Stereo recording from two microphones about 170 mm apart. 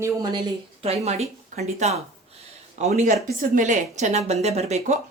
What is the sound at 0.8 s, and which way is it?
A woman's voice, 40° right (ahead or behind).